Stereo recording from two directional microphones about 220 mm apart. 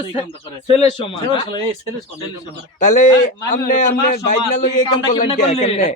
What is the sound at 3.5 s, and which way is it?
A man's voice, 35° left (ahead or behind).